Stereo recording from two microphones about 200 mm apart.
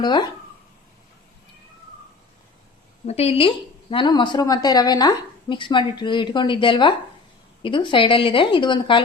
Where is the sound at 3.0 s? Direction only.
30° left (ahead or behind).